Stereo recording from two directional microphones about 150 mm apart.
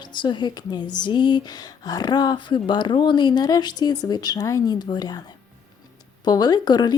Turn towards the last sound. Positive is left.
turn(degrees=30)  # may be behind; listen again after turning